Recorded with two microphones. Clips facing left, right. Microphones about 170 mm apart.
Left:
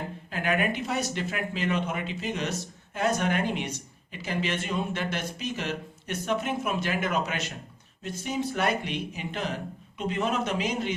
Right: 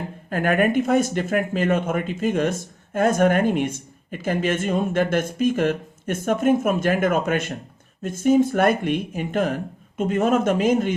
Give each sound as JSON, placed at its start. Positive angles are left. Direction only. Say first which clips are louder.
{"t": 0.3, "sound": "speech", "louder": "right 8 dB", "side_deg": -50}